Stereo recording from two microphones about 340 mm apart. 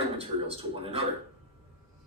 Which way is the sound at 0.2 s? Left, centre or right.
Centre.